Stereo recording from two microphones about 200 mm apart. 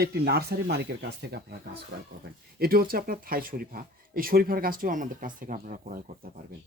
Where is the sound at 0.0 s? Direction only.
50° right (ahead or behind).